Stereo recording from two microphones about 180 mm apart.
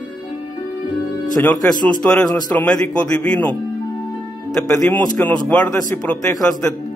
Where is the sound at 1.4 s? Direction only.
10° left (ahead or behind).